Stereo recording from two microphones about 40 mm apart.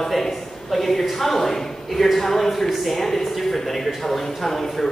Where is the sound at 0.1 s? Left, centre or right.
Centre.